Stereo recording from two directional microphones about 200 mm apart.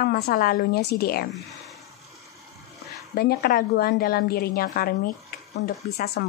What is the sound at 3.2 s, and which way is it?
A woman's voice, 50° left (ahead or behind).